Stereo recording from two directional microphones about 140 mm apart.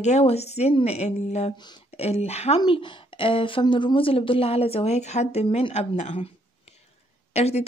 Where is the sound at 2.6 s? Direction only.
35° left (ahead or behind).